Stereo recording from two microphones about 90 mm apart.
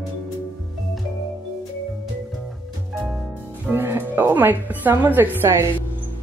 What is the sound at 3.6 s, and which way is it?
Speech, 20° right (ahead or behind).